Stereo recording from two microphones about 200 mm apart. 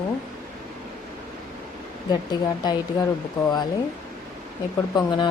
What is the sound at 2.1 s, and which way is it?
Speech, 20° left (ahead or behind).